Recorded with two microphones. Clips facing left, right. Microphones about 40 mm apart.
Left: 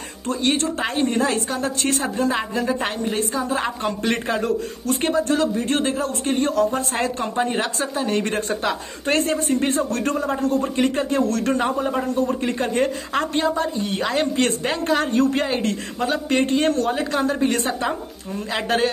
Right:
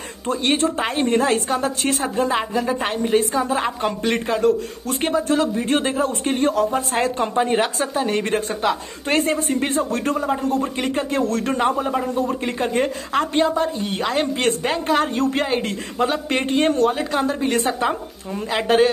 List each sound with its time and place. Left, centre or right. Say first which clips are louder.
0.3 s a woman's voice: right 2 dB; centre
6.3 s a woman's voice: even; centre
7.4 s a woman's voice: right 3 dB; centre
16.8 s a woman's voice: right 2 dB; centre